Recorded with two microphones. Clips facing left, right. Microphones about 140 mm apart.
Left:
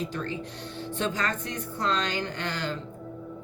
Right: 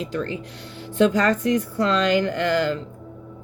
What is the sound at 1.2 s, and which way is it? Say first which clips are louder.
Speech: right 11 dB; 90° right.